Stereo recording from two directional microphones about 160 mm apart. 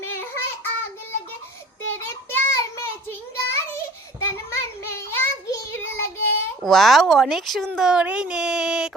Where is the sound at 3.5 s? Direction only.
15° left (ahead or behind).